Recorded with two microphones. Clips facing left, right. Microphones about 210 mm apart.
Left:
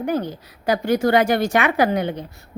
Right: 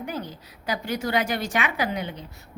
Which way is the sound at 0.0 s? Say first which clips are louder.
Left 9 dB; 60° left (ahead or behind).